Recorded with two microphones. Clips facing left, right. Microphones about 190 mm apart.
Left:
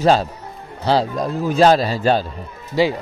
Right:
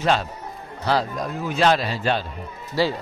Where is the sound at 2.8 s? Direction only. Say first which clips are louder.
Left 5 dB; 15° left (ahead or behind).